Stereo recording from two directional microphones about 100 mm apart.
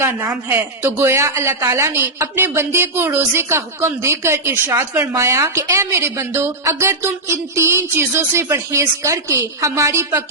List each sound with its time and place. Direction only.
0.0 s a woman's voice: 25° right (ahead or behind)